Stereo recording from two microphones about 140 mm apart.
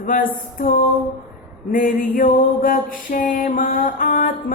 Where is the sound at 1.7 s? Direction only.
80° left.